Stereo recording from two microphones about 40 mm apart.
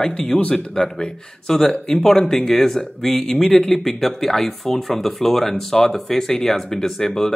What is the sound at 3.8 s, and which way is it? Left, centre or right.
Speech, centre.